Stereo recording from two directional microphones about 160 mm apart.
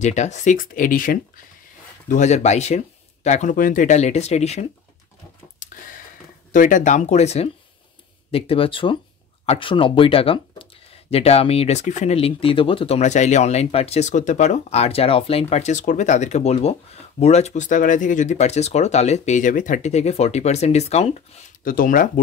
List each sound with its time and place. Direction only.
0.0 s speech: 45° left (ahead or behind)
2.0 s speech: 50° left (ahead or behind)
5.6 s a sound: 55° left (ahead or behind)
6.5 s speech: 55° left (ahead or behind)
21.6 s speech: 60° left (ahead or behind)